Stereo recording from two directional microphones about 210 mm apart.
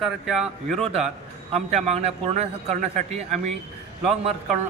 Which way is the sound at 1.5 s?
30° right (ahead or behind).